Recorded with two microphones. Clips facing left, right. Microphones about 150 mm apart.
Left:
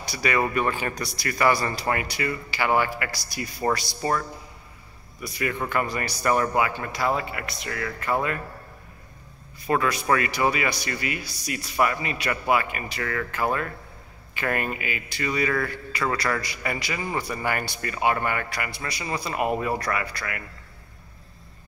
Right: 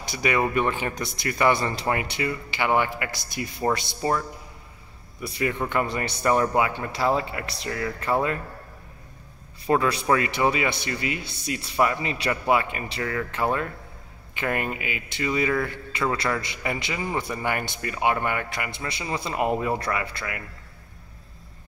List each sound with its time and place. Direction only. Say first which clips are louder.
0.0 s speech: right 1 dB; 20° right (ahead or behind)
5.2 s speech: right 2 dB; 25° right (ahead or behind)
9.7 s speech: right 1 dB; 30° right (ahead or behind)
14.3 s speech: even; 20° right (ahead or behind)